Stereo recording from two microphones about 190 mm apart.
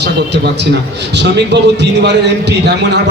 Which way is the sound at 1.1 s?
65° right (ahead or behind).